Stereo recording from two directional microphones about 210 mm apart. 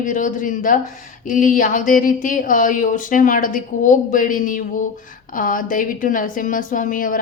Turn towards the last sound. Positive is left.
turn(degrees=40)  # may be behind; listen again after turning